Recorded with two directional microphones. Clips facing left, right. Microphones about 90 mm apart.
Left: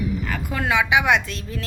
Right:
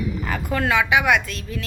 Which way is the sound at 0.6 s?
15° left (ahead or behind).